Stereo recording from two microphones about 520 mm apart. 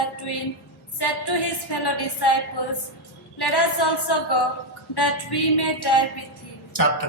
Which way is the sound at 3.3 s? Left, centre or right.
Left.